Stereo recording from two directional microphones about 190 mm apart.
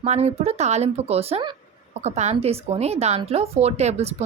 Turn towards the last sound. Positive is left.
turn(degrees=-35)  # may be behind; listen again after turning